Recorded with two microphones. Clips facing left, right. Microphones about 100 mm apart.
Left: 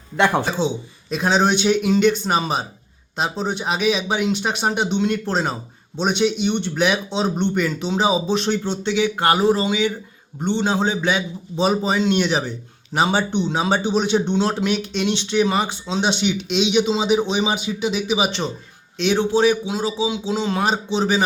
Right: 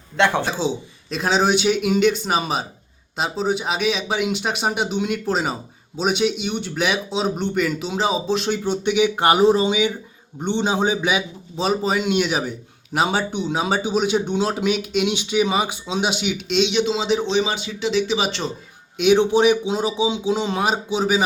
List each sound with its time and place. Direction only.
0.2 s speech: 10° left (ahead or behind); by 11.2 s 15° right (ahead or behind)
11.5 s speech: centre (ahead or behind)
18.9 s speech: 15° right (ahead or behind)